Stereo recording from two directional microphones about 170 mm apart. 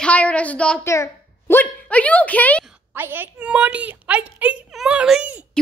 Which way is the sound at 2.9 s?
10° right (ahead or behind).